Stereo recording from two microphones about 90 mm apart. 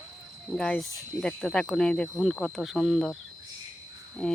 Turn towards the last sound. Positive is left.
turn(degrees=5)  # may be behind; listen again after turning